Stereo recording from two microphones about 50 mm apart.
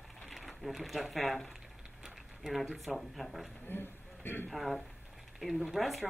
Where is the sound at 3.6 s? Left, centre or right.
Left.